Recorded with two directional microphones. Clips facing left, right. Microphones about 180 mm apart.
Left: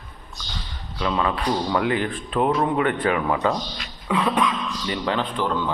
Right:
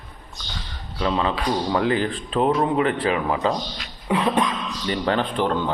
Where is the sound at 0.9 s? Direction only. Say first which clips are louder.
Right 1 dB; 30° right (ahead or behind).